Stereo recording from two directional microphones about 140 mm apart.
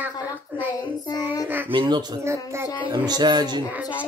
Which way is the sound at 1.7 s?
35° right (ahead or behind).